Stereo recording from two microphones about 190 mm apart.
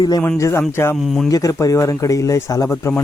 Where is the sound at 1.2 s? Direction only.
20° left (ahead or behind).